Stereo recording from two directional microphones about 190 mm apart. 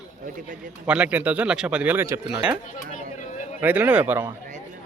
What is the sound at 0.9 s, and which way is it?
Speech, 5° right (ahead or behind).